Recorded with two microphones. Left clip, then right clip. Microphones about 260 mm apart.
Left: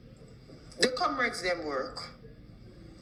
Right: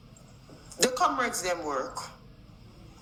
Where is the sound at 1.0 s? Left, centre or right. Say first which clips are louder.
Right 3 dB; centre.